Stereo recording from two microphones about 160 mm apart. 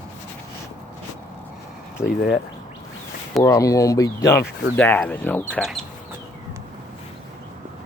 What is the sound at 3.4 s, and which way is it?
Speech, 20° left (ahead or behind).